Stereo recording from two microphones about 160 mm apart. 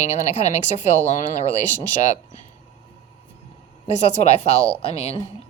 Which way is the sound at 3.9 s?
45° left (ahead or behind).